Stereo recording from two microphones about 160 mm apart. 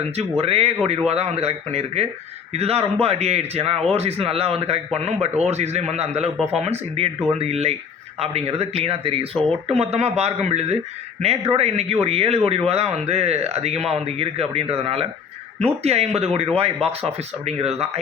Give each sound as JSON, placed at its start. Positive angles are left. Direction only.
{"t": 0.2, "sound": "a man's voice", "side_deg": -35}